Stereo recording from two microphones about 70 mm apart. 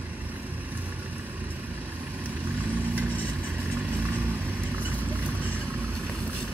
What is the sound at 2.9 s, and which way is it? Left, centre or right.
Vehicle, right.